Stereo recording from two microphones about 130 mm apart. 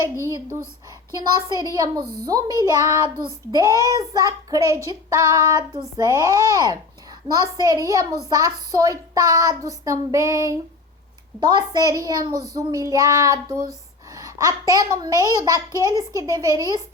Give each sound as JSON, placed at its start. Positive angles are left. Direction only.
{"t": 1.1, "sound": "speech", "side_deg": -30}
{"t": 13.7, "sound": "a sound", "side_deg": -25}
{"t": 14.7, "sound": "speech", "side_deg": -30}